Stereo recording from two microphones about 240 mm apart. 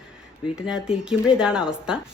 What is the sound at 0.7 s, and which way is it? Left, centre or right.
Speech, centre.